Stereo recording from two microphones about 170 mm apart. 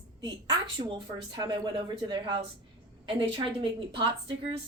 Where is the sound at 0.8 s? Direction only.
30° right (ahead or behind).